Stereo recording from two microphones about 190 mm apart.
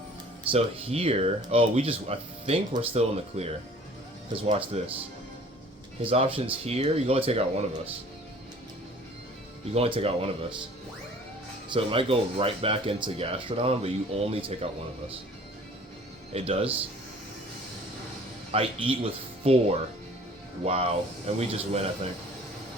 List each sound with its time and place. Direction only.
0.5 s speech: 30° right (ahead or behind)
6.0 s speech: 30° right (ahead or behind)
9.6 s speech: 30° right (ahead or behind)
11.7 s speech: 30° right (ahead or behind)
16.3 s speech: 30° right (ahead or behind)
18.5 s speech: 30° right (ahead or behind)